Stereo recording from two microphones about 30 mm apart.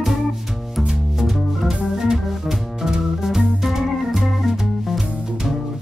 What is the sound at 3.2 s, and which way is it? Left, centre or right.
Music, centre.